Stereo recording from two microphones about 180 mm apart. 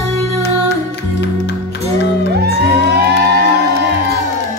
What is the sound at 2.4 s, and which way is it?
Music, 65° right (ahead or behind).